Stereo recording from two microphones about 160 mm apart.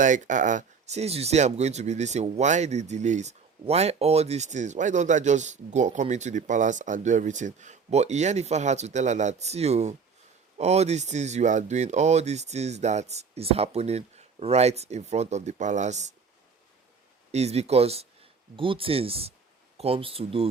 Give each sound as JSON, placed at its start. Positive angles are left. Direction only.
{"t": 0.0, "sound": "speech", "side_deg": -50}
{"t": 17.3, "sound": "speech", "side_deg": -40}